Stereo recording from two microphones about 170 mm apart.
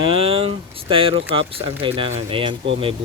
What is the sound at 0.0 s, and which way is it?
Speech, 35° right (ahead or behind).